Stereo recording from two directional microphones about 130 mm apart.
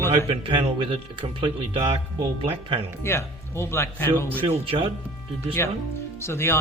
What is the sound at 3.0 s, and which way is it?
Speech, 20° left (ahead or behind).